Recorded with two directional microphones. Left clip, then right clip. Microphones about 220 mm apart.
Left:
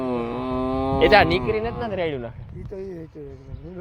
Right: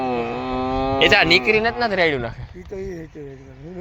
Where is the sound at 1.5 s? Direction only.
15° right (ahead or behind).